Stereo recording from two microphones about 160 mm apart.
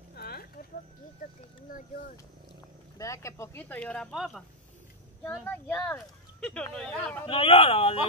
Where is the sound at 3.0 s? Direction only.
20° left (ahead or behind); by 4.4 s centre (ahead or behind).